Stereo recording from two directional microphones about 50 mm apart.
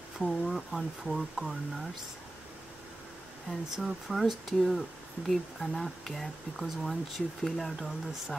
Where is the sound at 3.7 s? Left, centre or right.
Centre.